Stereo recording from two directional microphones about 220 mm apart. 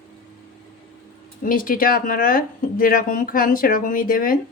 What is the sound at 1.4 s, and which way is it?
Speech, 40° left (ahead or behind).